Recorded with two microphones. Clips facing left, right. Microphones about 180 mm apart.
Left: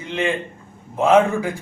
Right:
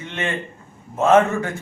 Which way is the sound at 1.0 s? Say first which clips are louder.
Even; 10° left (ahead or behind).